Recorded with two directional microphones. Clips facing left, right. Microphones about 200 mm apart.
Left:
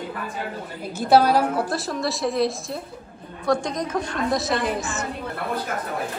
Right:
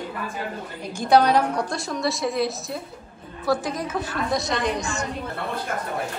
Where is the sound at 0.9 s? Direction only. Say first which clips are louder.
Left 1 dB; 5° left (ahead or behind).